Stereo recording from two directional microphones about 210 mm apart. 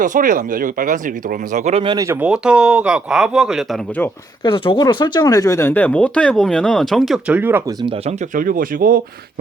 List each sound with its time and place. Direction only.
0.0 s speech: 40° right (ahead or behind); by 2.1 s 20° right (ahead or behind)
2.2 s speech: 5° right (ahead or behind)
4.4 s speech: 25° left (ahead or behind); by 7.9 s 10° right (ahead or behind)
8.3 s speech: 40° right (ahead or behind)